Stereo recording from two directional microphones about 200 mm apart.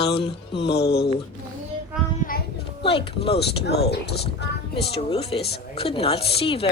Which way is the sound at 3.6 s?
55° left (ahead or behind).